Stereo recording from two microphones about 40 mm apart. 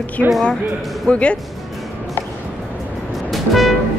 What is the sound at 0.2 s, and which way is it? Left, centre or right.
Speech, left.